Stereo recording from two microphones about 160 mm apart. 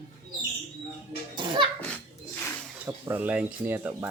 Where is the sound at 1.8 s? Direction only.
5° left (ahead or behind).